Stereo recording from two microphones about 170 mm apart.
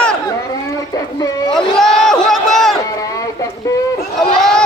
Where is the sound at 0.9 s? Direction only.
20° left (ahead or behind).